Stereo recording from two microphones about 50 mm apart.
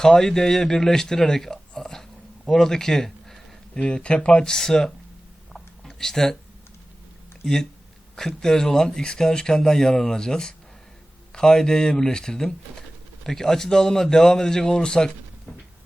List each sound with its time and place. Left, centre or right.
0.0 s speech: centre
3.8 s speech: left
4.4 s a man's voice: centre
5.5 s a sound: centre
7.4 s a man's voice: centre